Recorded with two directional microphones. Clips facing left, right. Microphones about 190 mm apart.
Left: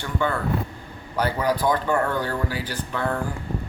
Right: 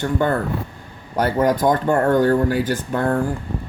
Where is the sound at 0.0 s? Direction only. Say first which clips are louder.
Right 5 dB; 45° right (ahead or behind).